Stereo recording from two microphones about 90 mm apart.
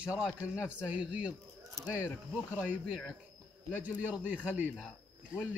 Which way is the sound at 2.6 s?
15° right (ahead or behind).